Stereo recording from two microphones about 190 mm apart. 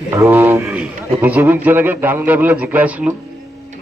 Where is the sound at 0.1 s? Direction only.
15° right (ahead or behind).